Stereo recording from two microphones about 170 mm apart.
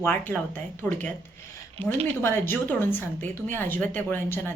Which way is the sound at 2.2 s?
15° left (ahead or behind).